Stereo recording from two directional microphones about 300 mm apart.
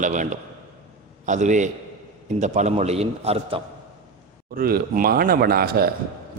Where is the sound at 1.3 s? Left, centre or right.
Right.